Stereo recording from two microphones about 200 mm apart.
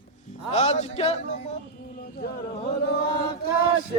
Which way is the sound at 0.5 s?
35° left (ahead or behind).